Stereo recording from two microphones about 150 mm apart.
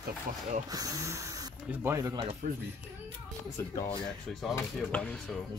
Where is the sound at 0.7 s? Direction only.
25° right (ahead or behind).